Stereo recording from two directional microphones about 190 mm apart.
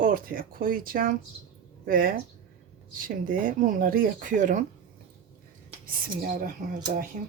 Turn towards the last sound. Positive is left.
turn(degrees=-50)  # may be behind; listen again after turning